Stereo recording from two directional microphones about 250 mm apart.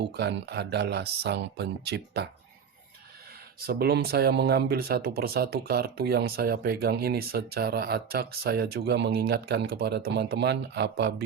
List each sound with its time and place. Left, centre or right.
0.0 s speech: right
3.6 s speech: right